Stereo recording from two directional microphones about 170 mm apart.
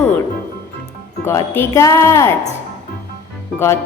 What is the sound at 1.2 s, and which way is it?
A woman's voice, 15° left (ahead or behind).